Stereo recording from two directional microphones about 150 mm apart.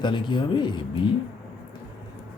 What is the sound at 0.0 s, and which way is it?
A man's voice, 30° left (ahead or behind).